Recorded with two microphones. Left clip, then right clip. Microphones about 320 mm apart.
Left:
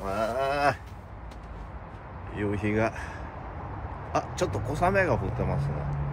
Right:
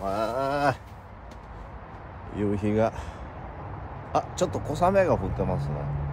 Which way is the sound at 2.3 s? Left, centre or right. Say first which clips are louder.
Right 2 dB; right.